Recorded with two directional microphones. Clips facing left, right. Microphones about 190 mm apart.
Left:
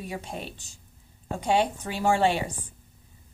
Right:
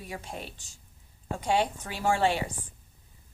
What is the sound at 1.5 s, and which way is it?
Speech, 20° left (ahead or behind).